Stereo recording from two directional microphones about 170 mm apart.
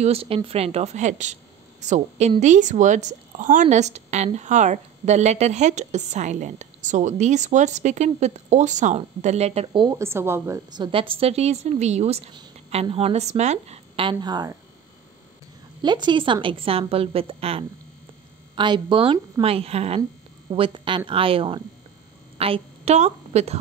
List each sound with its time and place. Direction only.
0.0 s a woman's voice: 35° right (ahead or behind)
9.7 s a woman's voice: 25° right (ahead or behind); by 12.2 s 40° right (ahead or behind)
12.4 s a woman's voice: 30° right (ahead or behind)
15.8 s a woman's voice: 25° right (ahead or behind)